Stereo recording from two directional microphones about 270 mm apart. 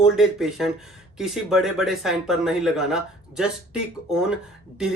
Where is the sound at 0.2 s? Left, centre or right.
Centre.